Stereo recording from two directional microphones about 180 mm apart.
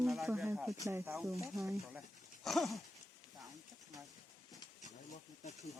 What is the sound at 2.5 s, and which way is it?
Speech, centre (ahead or behind).